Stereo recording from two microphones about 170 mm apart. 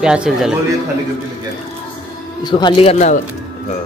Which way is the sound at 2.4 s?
25° left (ahead or behind).